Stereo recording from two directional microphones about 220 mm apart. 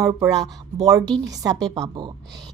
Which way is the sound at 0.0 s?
15° right (ahead or behind).